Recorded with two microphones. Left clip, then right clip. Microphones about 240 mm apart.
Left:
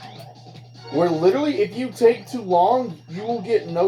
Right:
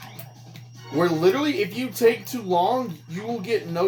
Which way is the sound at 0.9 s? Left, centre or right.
Right.